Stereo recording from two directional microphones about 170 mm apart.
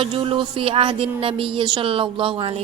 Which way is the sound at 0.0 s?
35° right (ahead or behind).